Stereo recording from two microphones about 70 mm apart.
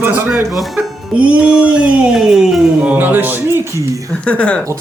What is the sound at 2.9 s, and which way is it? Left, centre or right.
Speech, right.